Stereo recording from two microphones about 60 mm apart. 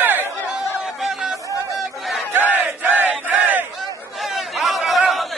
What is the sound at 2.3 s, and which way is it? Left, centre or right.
Battle cry, right.